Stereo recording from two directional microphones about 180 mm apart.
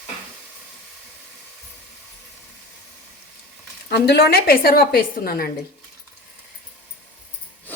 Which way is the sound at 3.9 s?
60° left (ahead or behind).